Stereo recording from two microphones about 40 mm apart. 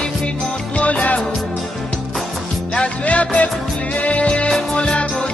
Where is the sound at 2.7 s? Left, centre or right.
Left.